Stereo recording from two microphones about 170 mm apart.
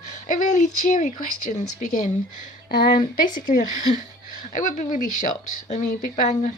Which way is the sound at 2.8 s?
30° left (ahead or behind).